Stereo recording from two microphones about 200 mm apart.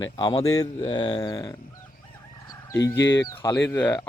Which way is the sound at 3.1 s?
15° left (ahead or behind).